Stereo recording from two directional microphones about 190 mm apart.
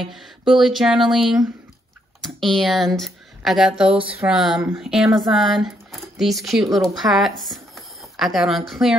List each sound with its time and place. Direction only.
0.0 s speech: centre (ahead or behind)